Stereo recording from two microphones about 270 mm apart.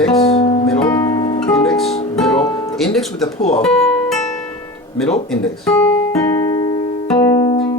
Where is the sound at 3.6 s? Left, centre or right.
Centre.